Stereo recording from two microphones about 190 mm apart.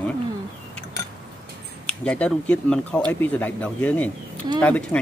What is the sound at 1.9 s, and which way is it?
Speech, 5° left (ahead or behind).